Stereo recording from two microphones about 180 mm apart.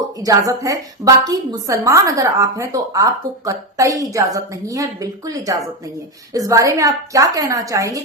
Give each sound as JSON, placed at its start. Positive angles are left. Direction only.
{"t": 0.2, "sound": "a woman's voice", "side_deg": -20}